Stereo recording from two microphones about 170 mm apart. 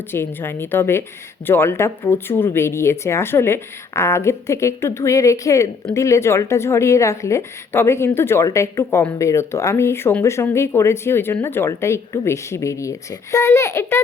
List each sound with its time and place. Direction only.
0.1 s a woman's voice: 15° left (ahead or behind)